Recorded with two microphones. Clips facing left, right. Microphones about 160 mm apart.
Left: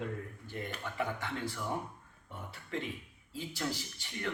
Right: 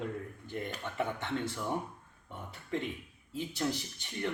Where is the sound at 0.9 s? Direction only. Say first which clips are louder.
Right 3 dB; 20° right (ahead or behind).